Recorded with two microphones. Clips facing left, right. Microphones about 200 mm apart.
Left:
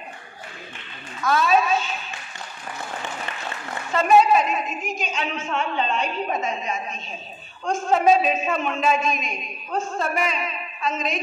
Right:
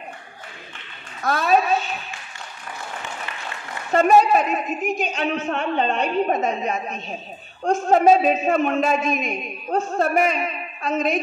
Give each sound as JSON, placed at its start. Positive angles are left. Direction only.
{"t": 1.2, "sound": "a man's voice", "side_deg": -55}
{"t": 3.9, "sound": "a man's voice", "side_deg": -50}
{"t": 7.9, "sound": "a man's voice", "side_deg": -45}